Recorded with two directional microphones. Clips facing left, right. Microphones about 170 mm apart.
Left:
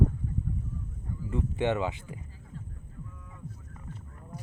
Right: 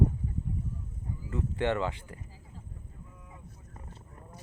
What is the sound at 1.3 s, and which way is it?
Speech, 20° left (ahead or behind).